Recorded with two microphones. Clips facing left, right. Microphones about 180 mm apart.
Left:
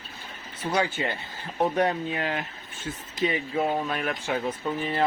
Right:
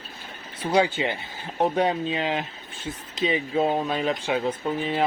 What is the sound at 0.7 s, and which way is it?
Speech, 15° right (ahead or behind).